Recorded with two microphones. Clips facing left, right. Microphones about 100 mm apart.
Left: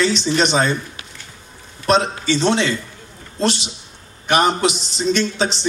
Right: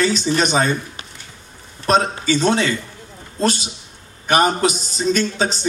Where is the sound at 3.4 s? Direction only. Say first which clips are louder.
Even; 40° right (ahead or behind).